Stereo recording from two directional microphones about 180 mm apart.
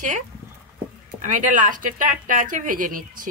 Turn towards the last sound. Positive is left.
turn(degrees=-50)  # may be behind; listen again after turning